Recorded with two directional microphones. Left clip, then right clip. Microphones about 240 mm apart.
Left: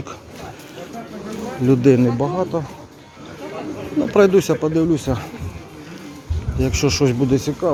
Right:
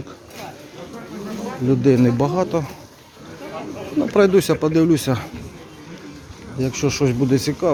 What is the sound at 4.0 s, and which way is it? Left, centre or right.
Speech, centre.